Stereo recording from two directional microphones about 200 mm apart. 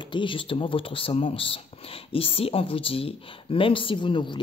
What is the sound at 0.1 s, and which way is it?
Speech, 25° left (ahead or behind).